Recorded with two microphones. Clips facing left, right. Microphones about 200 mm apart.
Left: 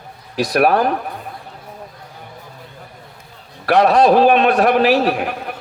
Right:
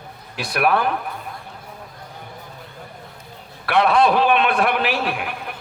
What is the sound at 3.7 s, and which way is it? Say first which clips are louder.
A man's voice: left 5 dB; 40° left (ahead or behind).